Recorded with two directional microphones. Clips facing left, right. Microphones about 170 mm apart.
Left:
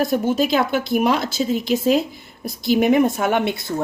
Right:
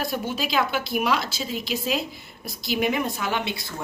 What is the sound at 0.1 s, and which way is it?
Speech, 50° left (ahead or behind).